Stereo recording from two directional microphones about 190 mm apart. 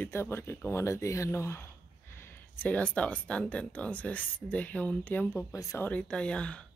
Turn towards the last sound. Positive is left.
turn(degrees=5)  # may be behind; listen again after turning